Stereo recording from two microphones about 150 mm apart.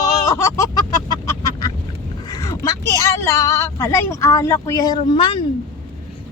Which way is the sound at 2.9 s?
20° left (ahead or behind).